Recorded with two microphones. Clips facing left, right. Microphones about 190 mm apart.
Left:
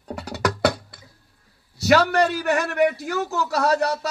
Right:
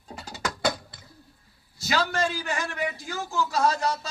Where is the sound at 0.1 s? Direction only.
70° left (ahead or behind).